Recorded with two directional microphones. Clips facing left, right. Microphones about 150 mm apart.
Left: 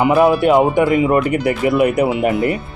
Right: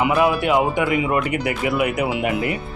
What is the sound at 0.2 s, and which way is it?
Speech, 40° left (ahead or behind).